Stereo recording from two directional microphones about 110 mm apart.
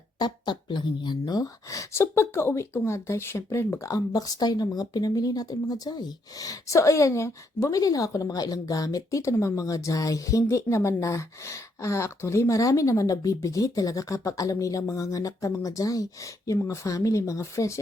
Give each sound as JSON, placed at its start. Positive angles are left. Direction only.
{"t": 0.2, "sound": "speech", "side_deg": 40}